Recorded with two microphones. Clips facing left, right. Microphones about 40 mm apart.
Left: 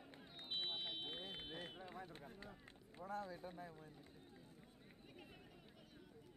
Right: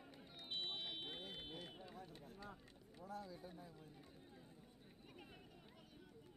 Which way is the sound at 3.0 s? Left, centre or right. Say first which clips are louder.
Left 4 dB; left.